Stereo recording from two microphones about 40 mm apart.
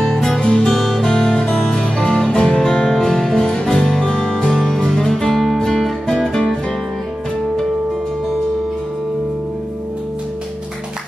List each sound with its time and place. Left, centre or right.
0.1 s music: centre
0.4 s music: left
0.7 s music: centre